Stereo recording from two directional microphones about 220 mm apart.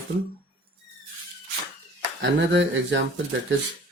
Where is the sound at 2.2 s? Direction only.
50° right (ahead or behind).